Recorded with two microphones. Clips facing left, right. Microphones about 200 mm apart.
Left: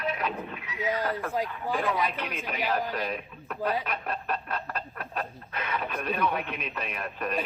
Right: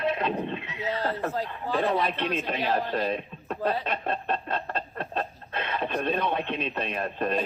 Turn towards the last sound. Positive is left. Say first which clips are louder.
# right 5 dB
turn(degrees=-30)  # may be behind; listen again after turning